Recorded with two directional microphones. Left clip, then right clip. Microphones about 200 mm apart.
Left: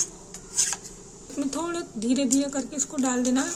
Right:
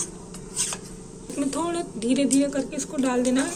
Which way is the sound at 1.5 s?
25° left (ahead or behind).